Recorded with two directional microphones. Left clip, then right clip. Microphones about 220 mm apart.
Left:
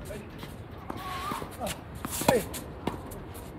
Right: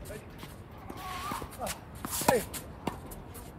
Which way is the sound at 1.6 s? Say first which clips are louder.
Left 2 dB; 15° right (ahead or behind).